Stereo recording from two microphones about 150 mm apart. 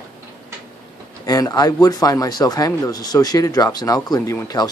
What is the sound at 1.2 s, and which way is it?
Speech, 25° left (ahead or behind).